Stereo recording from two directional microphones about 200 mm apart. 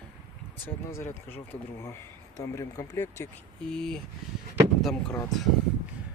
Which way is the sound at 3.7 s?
5° left (ahead or behind).